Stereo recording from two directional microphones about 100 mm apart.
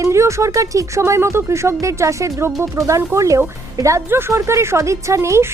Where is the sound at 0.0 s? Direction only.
30° right (ahead or behind).